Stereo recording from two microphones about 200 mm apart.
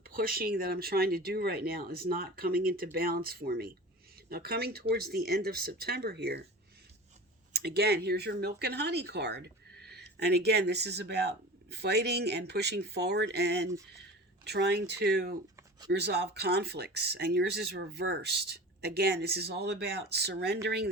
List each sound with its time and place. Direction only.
0.0 s speech: 45° right (ahead or behind)
7.5 s speech: 55° right (ahead or behind)